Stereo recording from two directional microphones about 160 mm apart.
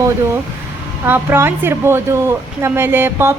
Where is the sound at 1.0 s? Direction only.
15° right (ahead or behind).